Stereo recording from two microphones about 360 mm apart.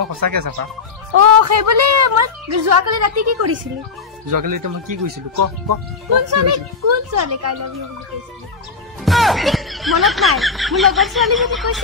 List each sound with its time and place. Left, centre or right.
0.1 s speech: right
1.1 s a woman's voice: right
4.3 s speech: right
9.0 s speech: centre